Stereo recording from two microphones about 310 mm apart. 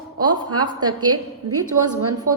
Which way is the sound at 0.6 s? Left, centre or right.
Centre.